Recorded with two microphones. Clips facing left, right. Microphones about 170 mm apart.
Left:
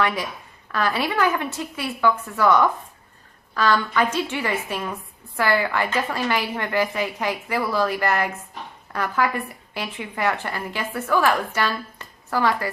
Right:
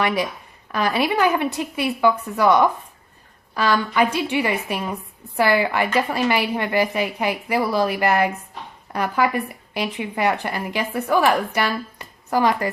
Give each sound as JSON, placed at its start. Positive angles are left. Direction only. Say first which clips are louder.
{"t": 0.7, "sound": "speech", "louder": "right 3 dB", "side_deg": -15}